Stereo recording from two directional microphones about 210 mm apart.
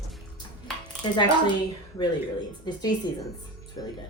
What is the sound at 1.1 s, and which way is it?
Speech, 20° left (ahead or behind).